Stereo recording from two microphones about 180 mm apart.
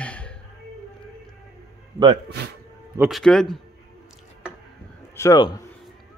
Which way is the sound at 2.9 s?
Centre (ahead or behind).